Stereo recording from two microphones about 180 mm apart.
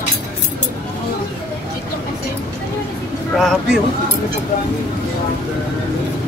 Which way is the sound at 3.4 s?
Centre (ahead or behind).